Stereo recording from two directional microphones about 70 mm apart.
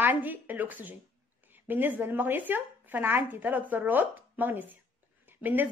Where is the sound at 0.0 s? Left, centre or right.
Right.